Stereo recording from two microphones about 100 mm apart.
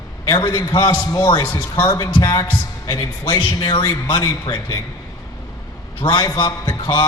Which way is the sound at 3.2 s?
50° left (ahead or behind).